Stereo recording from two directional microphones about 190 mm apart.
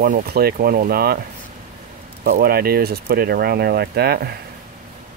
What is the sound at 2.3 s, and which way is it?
Speech, 50° right (ahead or behind).